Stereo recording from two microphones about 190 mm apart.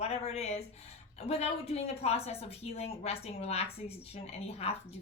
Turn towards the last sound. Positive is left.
turn(degrees=35)  # may be behind; listen again after turning